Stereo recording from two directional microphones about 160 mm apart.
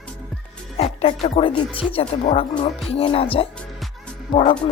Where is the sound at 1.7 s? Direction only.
35° left (ahead or behind).